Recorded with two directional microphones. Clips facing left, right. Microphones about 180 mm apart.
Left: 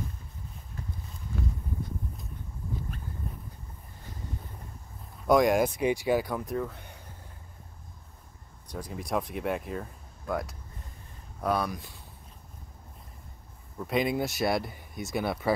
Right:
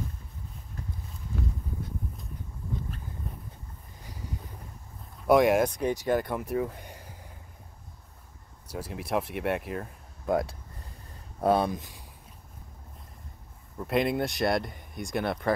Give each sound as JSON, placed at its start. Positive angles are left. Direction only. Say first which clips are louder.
{"t": 5.2, "sound": "speech", "louder": "right 1 dB", "side_deg": -5}
{"t": 5.8, "sound": "speech", "louder": "left 1 dB", "side_deg": 10}
{"t": 8.6, "sound": "speech", "louder": "right 1 dB", "side_deg": -5}
{"t": 10.2, "sound": "speech", "louder": "right 5 dB", "side_deg": -25}
{"t": 13.7, "sound": "speech", "louder": "right 1 dB", "side_deg": 0}